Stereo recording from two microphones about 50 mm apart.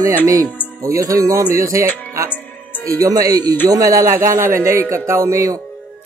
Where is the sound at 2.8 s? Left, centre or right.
Right.